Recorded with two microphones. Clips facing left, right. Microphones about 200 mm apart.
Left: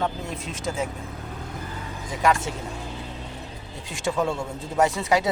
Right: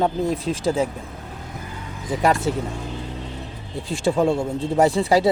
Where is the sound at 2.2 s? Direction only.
35° right (ahead or behind).